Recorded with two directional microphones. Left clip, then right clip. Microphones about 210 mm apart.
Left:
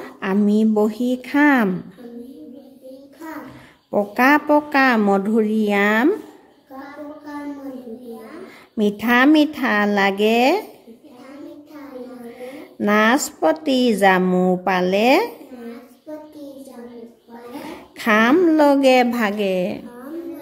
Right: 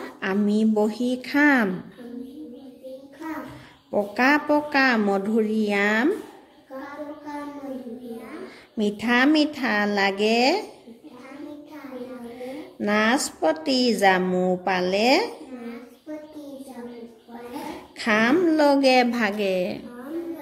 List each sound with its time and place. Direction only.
0.0 s a woman's voice: 20° left (ahead or behind)
3.9 s a woman's voice: 20° left (ahead or behind)
8.7 s a woman's voice: 20° left (ahead or behind)
12.4 s a woman's voice: 20° left (ahead or behind)
17.9 s a woman's voice: 20° left (ahead or behind)